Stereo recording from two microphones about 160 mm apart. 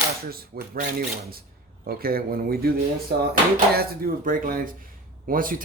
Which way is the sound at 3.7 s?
65° right (ahead or behind).